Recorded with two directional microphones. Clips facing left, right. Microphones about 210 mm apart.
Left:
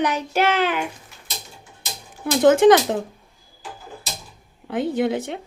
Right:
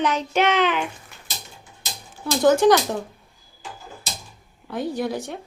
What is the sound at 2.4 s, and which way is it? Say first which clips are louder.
Speech: left 3 dB; 20° left (ahead or behind).